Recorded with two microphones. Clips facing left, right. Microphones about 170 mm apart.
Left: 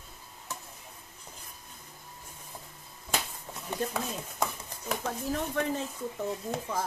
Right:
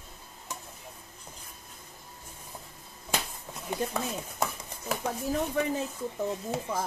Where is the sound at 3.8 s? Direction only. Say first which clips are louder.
Right 1 dB; 10° right (ahead or behind).